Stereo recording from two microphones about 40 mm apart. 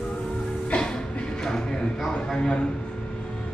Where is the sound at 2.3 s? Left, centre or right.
Left.